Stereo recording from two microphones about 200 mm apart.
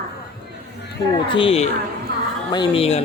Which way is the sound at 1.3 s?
25° left (ahead or behind).